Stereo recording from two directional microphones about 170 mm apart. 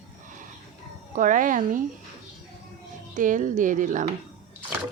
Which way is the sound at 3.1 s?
50° right (ahead or behind).